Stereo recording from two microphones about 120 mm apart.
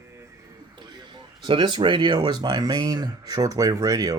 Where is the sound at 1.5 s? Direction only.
40° right (ahead or behind).